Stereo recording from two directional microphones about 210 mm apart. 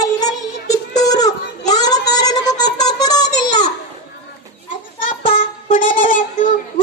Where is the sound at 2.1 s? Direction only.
20° left (ahead or behind).